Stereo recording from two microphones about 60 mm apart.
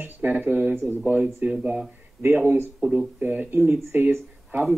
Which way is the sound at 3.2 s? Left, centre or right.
Right.